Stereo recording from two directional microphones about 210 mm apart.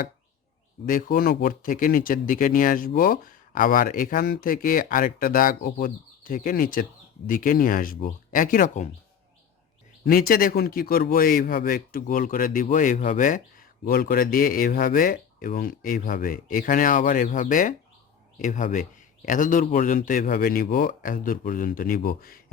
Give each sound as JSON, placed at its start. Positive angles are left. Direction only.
{"t": 0.9, "sound": "speech", "side_deg": 40}
{"t": 10.0, "sound": "a man's voice", "side_deg": 45}